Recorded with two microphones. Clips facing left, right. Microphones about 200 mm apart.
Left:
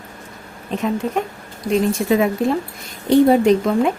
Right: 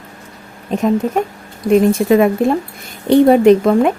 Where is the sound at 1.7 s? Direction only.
55° right (ahead or behind).